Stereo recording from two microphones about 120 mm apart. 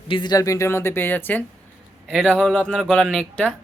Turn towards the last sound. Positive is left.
turn(degrees=5)  # may be behind; listen again after turning